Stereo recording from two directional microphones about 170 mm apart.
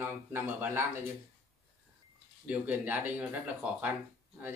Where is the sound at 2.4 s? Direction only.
10° right (ahead or behind).